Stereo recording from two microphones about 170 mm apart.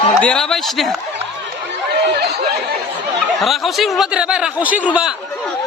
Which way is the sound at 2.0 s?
70° right (ahead or behind).